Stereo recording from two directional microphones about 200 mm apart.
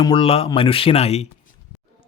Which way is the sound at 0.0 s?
25° left (ahead or behind).